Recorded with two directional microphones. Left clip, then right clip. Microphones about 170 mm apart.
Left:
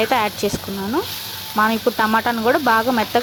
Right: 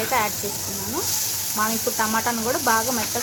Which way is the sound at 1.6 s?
50° left (ahead or behind).